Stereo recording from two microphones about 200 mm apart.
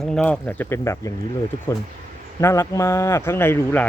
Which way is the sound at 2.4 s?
15° left (ahead or behind).